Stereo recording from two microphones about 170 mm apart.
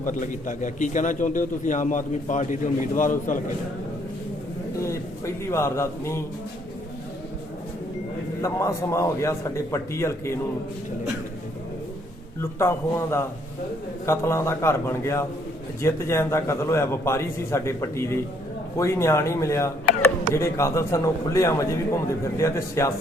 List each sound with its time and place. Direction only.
0.0 s a man's voice: 50° left (ahead or behind)
4.8 s a man's voice: 15° left (ahead or behind)
8.4 s speech: 20° left (ahead or behind)
12.4 s speech: 15° left (ahead or behind)